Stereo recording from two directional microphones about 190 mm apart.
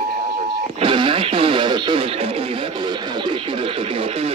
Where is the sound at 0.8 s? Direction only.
25° right (ahead or behind).